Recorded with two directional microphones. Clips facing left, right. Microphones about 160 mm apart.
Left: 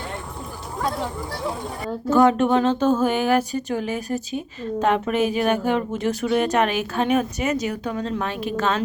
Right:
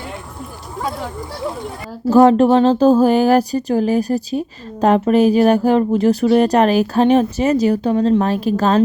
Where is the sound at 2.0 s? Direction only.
35° right (ahead or behind).